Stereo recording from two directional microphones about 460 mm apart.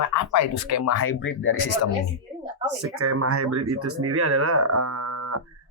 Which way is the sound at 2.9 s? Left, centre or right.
Right.